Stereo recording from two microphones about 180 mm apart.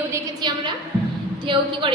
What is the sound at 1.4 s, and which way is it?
Speech, 30° right (ahead or behind).